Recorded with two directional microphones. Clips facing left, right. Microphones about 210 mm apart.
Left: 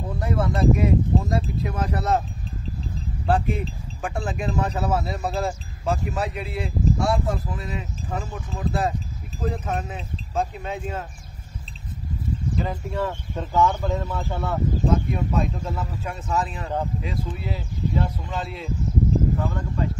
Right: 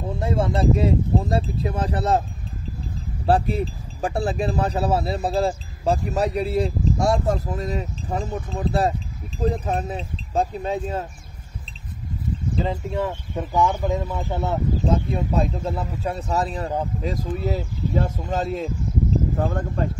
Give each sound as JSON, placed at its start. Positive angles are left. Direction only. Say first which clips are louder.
{"t": 0.2, "sound": "speech", "louder": "right 1 dB", "side_deg": -25}
{"t": 3.3, "sound": "speech", "louder": "right 3 dB", "side_deg": -35}
{"t": 12.5, "sound": "speech", "louder": "right 4 dB", "side_deg": -20}